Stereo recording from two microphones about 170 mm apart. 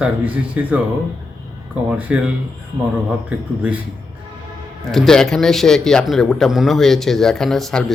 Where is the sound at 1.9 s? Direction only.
10° right (ahead or behind).